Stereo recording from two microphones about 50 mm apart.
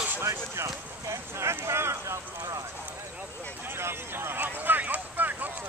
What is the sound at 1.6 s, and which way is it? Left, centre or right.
Vehicle, right.